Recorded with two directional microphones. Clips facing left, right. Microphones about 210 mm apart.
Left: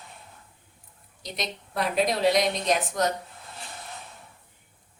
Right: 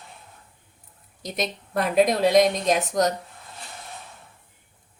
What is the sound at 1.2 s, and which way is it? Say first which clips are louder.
A woman's voice: right 5 dB; 50° right (ahead or behind).